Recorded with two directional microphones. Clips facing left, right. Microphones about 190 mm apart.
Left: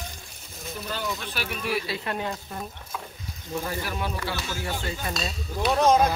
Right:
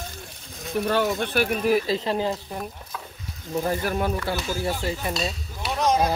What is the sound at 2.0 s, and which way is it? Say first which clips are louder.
Speech: right 6 dB; 30° right (ahead or behind).